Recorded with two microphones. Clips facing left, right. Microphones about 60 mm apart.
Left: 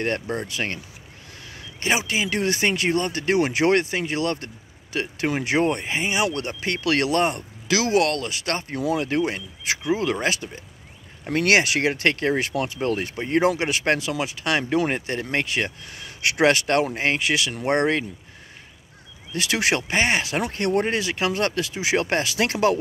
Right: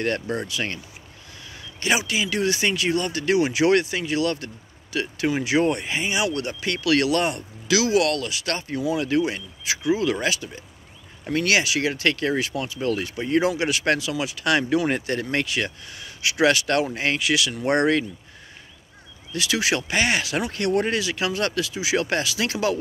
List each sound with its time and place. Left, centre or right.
0.0 s speech: left
0.5 s speech: left
1.8 s speech: left
11.9 s speech: left
15.2 s speech: left
16.2 s speech: left
19.3 s speech: left
19.9 s speech: left